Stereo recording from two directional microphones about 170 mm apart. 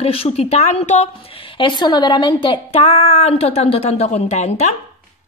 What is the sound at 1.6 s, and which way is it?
A woman's voice, 25° left (ahead or behind).